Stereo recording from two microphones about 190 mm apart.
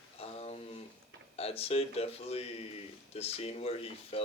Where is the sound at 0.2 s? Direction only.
30° left (ahead or behind).